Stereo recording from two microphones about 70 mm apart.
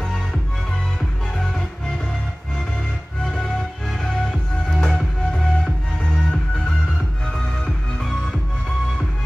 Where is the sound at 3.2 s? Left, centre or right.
Centre.